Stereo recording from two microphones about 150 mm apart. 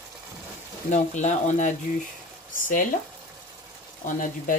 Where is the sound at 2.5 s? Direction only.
65° left (ahead or behind).